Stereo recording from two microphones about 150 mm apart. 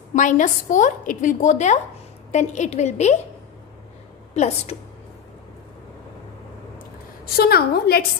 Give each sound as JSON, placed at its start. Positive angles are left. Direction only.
{"t": 0.1, "sound": "a woman's voice", "side_deg": 55}
{"t": 4.3, "sound": "a woman's voice", "side_deg": 50}
{"t": 7.3, "sound": "a woman's voice", "side_deg": 90}